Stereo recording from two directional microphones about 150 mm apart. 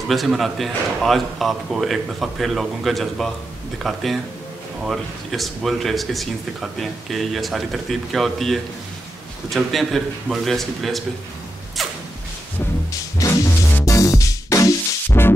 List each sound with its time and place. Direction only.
0.1 s speech: centre (ahead or behind)
12.9 s music: 20° left (ahead or behind)